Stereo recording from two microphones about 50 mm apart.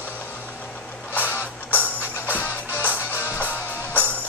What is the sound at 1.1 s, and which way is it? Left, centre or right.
Music, left.